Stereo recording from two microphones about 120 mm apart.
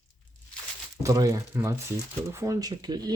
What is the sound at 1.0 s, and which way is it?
Speech, 25° right (ahead or behind).